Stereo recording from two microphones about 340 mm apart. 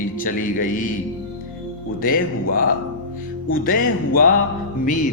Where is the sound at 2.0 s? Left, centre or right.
Left.